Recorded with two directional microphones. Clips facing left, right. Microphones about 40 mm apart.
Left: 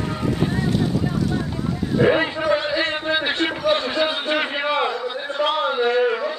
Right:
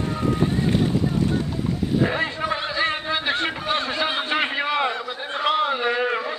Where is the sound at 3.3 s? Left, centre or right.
Centre.